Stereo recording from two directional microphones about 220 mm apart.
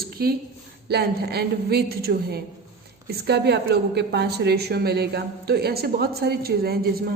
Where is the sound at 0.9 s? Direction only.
45° right (ahead or behind).